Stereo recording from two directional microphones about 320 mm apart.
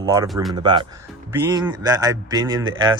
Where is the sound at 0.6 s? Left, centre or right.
Centre.